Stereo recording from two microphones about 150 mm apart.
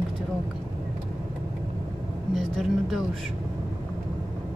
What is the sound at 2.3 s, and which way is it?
Speech, centre (ahead or behind).